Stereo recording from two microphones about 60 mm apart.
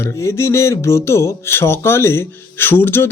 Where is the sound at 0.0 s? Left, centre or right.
Left.